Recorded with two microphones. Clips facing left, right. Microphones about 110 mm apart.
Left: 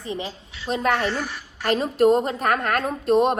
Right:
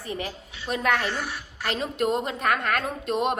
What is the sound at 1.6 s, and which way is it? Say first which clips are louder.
A woman's voice: left 8 dB; 40° left (ahead or behind).